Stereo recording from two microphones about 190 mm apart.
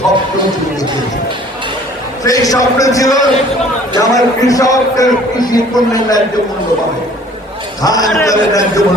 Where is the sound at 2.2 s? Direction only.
20° left (ahead or behind).